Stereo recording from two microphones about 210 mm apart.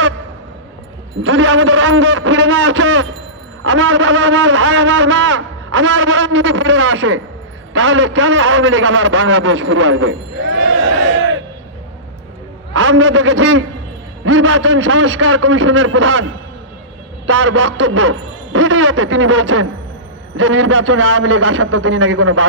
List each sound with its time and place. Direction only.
1.2 s a man's voice: 70° right (ahead or behind)
12.7 s a man's voice: 70° right (ahead or behind)
17.3 s a man's voice: 70° right (ahead or behind)